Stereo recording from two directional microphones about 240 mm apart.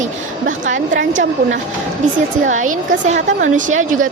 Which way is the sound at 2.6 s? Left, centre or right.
Right.